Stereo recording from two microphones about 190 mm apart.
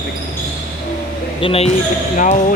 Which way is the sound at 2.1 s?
45° left (ahead or behind).